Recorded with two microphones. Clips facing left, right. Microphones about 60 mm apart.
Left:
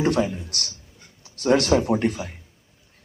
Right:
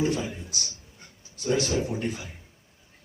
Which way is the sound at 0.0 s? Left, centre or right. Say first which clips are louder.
Left 5 dB; left.